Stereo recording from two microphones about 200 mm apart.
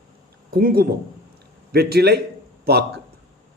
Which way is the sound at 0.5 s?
50° right (ahead or behind).